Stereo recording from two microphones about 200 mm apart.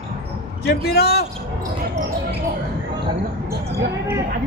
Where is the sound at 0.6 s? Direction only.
50° left (ahead or behind).